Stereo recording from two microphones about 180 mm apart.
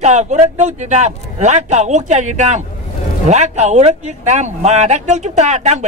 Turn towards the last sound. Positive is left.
turn(degrees=-40)  # may be behind; listen again after turning